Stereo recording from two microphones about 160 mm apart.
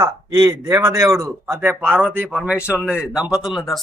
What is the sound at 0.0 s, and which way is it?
Speech, 25° right (ahead or behind).